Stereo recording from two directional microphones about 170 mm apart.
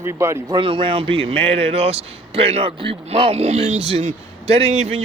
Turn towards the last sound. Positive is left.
turn(degrees=-40)  # may be behind; listen again after turning